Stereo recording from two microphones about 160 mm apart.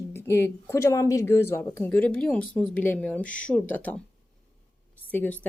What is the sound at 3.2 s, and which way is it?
Speech, 55° left (ahead or behind).